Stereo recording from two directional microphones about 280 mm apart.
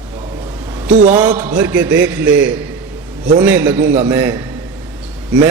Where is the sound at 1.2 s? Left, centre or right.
Centre.